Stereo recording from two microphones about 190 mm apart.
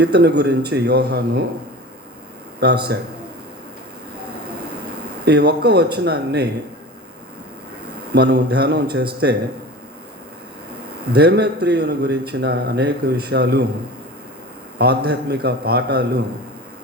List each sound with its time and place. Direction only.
0.0 s a man's voice: 60° right (ahead or behind)
2.6 s a man's voice: 60° right (ahead or behind)
5.2 s a man's voice: 55° right (ahead or behind)
8.1 s a man's voice: 60° right (ahead or behind)
11.1 s a man's voice: 60° right (ahead or behind)
14.8 s a man's voice: 60° right (ahead or behind)